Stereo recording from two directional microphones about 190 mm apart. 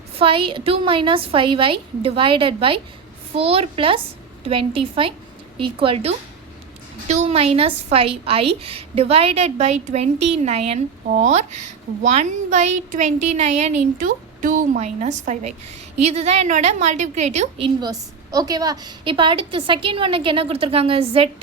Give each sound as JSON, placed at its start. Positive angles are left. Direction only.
{"t": 0.2, "sound": "a woman's voice", "side_deg": -30}
{"t": 17.7, "sound": "a woman's voice", "side_deg": -20}